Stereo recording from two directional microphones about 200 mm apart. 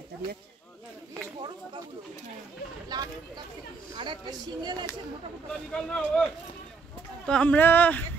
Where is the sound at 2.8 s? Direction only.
20° right (ahead or behind).